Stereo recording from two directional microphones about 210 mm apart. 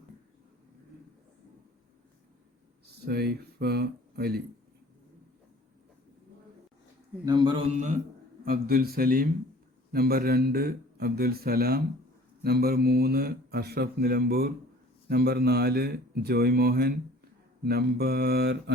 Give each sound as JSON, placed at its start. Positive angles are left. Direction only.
{"t": 3.0, "sound": "speech", "side_deg": -50}
{"t": 7.3, "sound": "a man's voice", "side_deg": -20}
{"t": 7.8, "sound": "a man's voice", "side_deg": -35}